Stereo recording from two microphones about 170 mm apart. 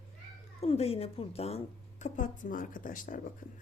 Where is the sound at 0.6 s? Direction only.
35° left (ahead or behind).